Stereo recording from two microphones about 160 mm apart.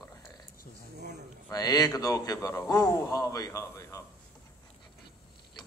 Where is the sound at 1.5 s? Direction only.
25° left (ahead or behind).